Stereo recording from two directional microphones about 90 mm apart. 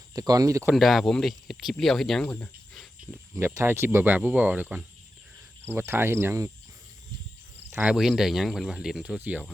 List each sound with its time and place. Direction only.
0.1 s speech: 45° right (ahead or behind)
0.7 s speech: centre (ahead or behind)
3.3 s speech: 30° right (ahead or behind)
7.9 s speech: 5° right (ahead or behind)
9.1 s speech: 20° right (ahead or behind)